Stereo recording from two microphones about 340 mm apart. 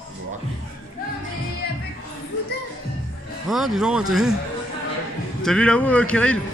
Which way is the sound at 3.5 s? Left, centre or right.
Centre.